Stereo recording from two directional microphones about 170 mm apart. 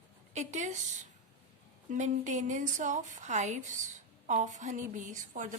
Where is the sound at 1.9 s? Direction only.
45° right (ahead or behind).